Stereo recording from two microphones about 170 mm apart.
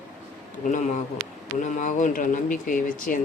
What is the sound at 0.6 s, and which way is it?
Speech, 45° left (ahead or behind).